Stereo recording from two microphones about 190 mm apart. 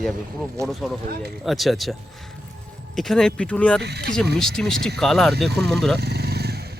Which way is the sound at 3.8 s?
60° right (ahead or behind).